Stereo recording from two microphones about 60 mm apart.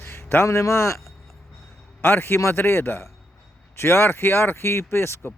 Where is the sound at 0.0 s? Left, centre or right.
Left.